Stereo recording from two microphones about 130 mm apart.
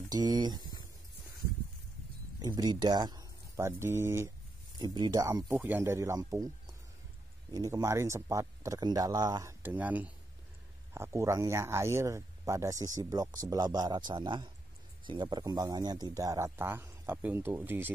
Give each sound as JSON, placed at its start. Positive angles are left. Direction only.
{"t": 0.1, "sound": "speech", "side_deg": -30}
{"t": 2.4, "sound": "speech", "side_deg": -30}
{"t": 4.7, "sound": "speech", "side_deg": -35}
{"t": 5.5, "sound": "a man's voice", "side_deg": -15}
{"t": 7.5, "sound": "a man's voice", "side_deg": -25}